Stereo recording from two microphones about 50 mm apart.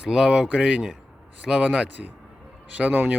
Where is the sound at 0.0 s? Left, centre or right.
Centre.